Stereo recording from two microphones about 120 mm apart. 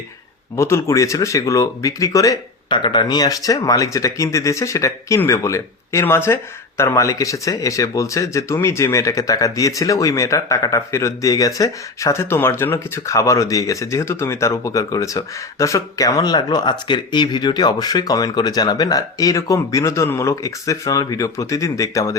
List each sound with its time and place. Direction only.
0.5 s speech: 25° left (ahead or behind)
2.6 s speech: 40° left (ahead or behind)